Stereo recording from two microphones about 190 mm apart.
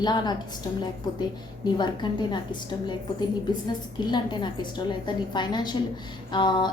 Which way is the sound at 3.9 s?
25° left (ahead or behind).